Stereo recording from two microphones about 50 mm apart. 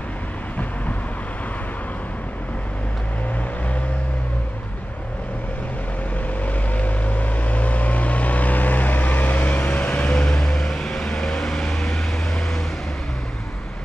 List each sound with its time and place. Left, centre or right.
6.4 s vehicle: left; by 12.0 s centre